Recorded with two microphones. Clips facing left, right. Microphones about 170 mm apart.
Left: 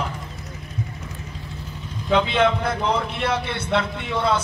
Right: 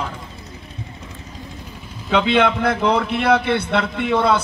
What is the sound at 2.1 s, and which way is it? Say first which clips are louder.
A man's voice: right 2 dB; 65° right (ahead or behind).